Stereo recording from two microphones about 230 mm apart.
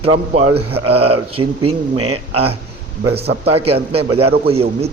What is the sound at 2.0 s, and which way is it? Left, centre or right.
Speech, right.